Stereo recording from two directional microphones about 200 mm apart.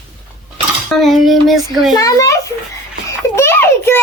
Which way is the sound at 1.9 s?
15° left (ahead or behind).